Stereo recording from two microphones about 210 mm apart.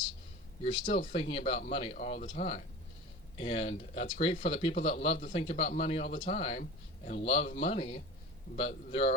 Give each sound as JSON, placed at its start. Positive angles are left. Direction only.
{"t": 0.6, "sound": "speech", "side_deg": 30}